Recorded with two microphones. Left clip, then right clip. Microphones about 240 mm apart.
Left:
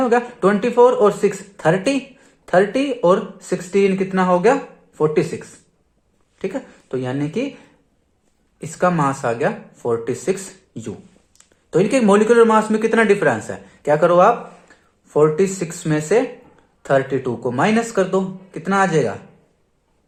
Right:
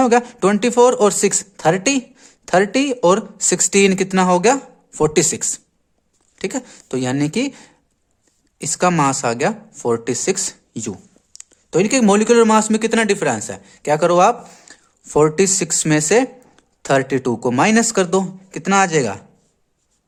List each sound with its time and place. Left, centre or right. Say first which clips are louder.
0.0 s speech: right 2 dB; right
5.1 s speech: right 2 dB; right
6.5 s speech: right 1 dB; right
11.3 s speech: even; right